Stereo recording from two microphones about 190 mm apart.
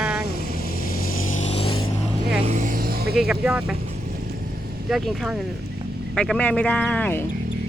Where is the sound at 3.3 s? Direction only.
5° right (ahead or behind).